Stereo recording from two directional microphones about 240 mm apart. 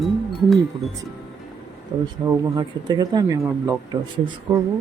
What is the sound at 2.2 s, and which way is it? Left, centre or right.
Speech, centre.